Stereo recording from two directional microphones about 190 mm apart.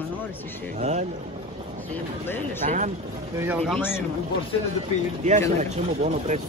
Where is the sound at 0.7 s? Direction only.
35° right (ahead or behind).